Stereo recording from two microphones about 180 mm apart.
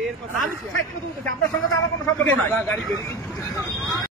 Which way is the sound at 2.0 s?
10° left (ahead or behind).